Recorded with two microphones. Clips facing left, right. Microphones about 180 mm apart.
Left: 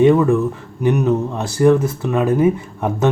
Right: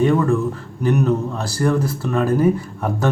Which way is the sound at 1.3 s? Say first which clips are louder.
Left 6 dB; 20° left (ahead or behind).